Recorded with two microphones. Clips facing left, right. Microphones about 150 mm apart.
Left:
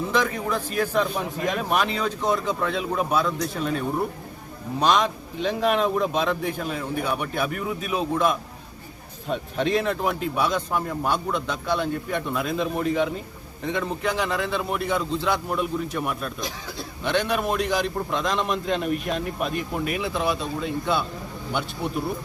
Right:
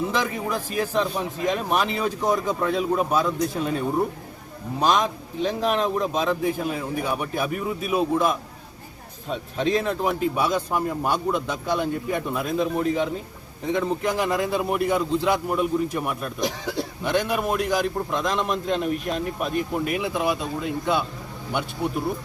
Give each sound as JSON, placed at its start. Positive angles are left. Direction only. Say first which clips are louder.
{"t": 0.2, "sound": "a man's voice", "louder": "left 1 dB", "side_deg": -5}